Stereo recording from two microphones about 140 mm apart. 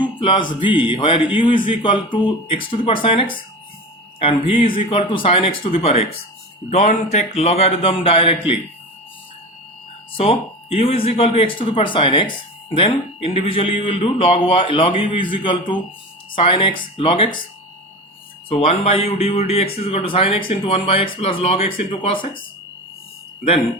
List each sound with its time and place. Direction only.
0.0 s speech: 35° left (ahead or behind)
10.2 s speech: 45° left (ahead or behind)
18.4 s speech: 45° left (ahead or behind)